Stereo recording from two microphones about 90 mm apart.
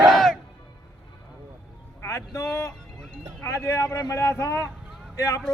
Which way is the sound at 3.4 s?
30° left (ahead or behind).